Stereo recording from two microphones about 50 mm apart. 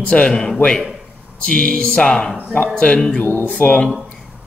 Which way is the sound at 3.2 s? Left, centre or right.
Left.